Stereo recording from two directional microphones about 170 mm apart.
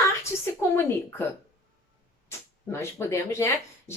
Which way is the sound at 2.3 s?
15° left (ahead or behind).